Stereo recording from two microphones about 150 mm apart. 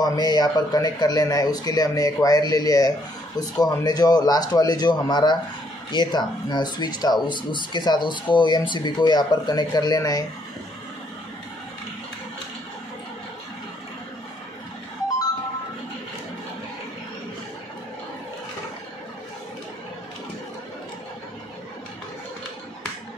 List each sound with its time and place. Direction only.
0.0 s speech: 25° left (ahead or behind)